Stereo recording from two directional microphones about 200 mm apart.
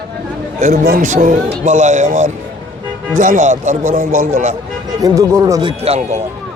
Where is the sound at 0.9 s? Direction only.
40° right (ahead or behind).